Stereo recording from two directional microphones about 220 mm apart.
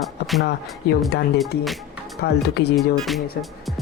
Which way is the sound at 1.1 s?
50° left (ahead or behind).